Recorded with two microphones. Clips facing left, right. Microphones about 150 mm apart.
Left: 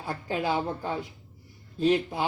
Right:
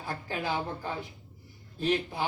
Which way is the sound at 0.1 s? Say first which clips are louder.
Left 4 dB; 25° left (ahead or behind).